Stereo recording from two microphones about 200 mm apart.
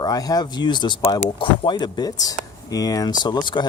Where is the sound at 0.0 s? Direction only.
20° left (ahead or behind).